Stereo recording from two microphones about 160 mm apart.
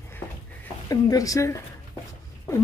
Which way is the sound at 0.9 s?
20° left (ahead or behind).